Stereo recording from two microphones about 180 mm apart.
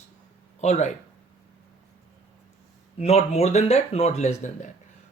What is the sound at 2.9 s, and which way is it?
Speech, 35° left (ahead or behind).